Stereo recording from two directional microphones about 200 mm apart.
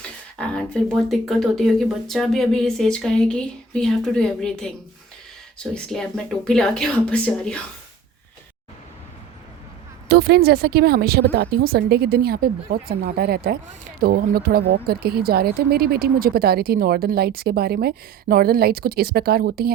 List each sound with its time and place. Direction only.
0.3 s speech: 5° left (ahead or behind)
5.7 s speech: 5° left (ahead or behind)
10.1 s speech: 50° right (ahead or behind)